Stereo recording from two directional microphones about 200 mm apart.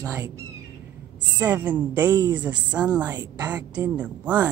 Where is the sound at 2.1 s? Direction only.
20° right (ahead or behind).